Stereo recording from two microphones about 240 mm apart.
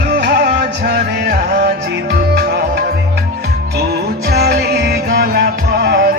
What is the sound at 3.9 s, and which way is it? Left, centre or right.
Music, right.